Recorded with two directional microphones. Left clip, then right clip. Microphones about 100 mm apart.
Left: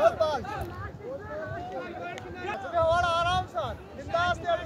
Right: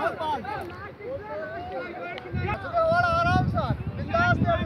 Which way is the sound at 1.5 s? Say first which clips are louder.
Right 2 dB; 15° left (ahead or behind).